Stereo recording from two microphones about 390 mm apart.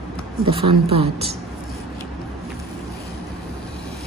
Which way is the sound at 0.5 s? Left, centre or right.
Centre.